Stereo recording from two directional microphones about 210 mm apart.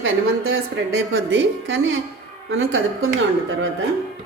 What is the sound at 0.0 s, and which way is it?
A woman's voice, 70° right (ahead or behind).